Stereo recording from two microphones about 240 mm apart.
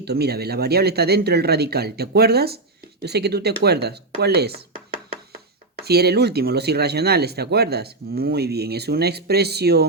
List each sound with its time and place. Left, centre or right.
0.0 s speech: right
5.8 s speech: right